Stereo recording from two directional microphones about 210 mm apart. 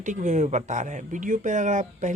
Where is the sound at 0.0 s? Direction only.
35° right (ahead or behind).